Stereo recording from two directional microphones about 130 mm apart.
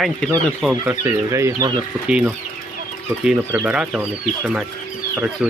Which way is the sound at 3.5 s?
10° right (ahead or behind).